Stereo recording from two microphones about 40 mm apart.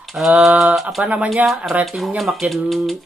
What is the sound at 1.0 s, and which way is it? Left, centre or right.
Speech, right.